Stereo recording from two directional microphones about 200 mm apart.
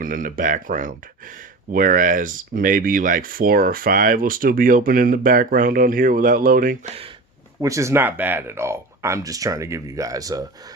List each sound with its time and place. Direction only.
0.0 s speech: 45° right (ahead or behind)
7.6 s speech: 15° right (ahead or behind)